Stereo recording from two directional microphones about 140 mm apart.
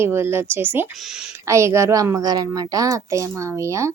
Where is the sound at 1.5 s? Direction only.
20° right (ahead or behind).